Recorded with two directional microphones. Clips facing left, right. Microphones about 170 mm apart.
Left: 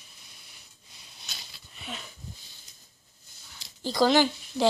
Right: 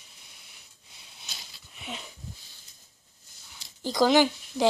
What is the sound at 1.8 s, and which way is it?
Dog, 20° right (ahead or behind).